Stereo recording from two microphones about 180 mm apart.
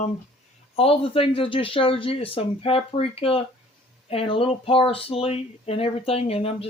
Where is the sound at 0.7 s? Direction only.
30° left (ahead or behind).